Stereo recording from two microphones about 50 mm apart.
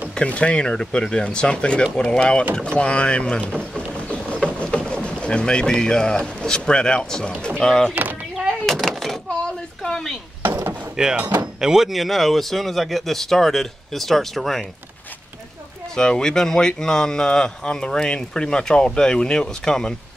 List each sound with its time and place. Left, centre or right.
0.1 s speech: left
7.9 s a sound: right
8.6 s a sound: centre
9.8 s chopping: centre
11.0 s speech: centre
15.9 s speech: centre